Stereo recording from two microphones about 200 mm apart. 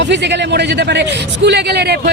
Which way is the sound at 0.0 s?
60° right (ahead or behind).